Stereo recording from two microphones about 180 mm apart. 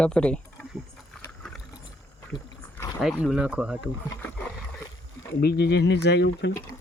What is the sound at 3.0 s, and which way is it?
Speech, 5° right (ahead or behind).